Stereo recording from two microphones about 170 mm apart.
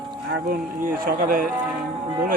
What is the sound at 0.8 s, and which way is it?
Speech, 55° right (ahead or behind).